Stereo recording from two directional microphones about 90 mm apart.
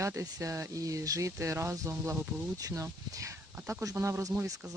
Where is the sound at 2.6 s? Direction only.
40° right (ahead or behind).